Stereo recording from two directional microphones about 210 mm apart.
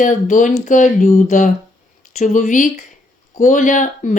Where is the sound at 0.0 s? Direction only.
35° left (ahead or behind).